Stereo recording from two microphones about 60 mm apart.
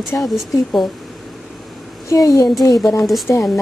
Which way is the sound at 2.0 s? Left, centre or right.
Left.